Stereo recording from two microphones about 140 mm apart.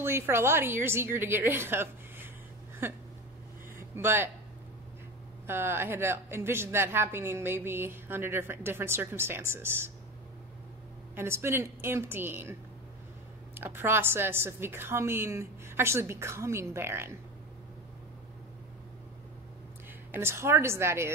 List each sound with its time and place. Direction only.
0.0 s a woman's voice: 15° right (ahead or behind)
3.7 s music: 15° right (ahead or behind)
5.5 s a woman's voice: 15° right (ahead or behind)
11.1 s a woman's voice: 15° right (ahead or behind)
13.6 s a woman's voice: 15° right (ahead or behind)
20.1 s a woman's voice: 15° right (ahead or behind)